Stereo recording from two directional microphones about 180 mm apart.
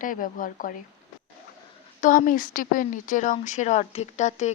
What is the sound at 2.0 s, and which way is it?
Speech, 50° left (ahead or behind).